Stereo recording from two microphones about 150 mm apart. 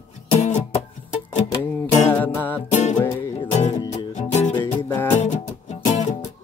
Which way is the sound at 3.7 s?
50° left (ahead or behind).